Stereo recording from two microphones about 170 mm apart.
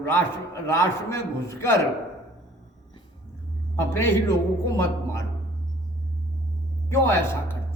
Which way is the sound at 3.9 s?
15° left (ahead or behind).